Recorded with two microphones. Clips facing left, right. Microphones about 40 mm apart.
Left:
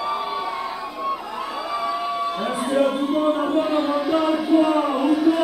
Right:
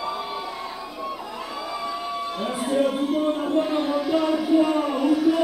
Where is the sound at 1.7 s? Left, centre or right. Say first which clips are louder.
Left 6 dB; centre.